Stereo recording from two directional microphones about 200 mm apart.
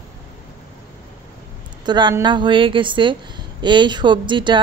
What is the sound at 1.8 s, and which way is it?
A woman's voice, 20° right (ahead or behind).